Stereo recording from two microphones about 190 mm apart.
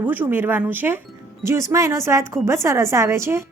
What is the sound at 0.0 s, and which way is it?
Speech, 10° right (ahead or behind).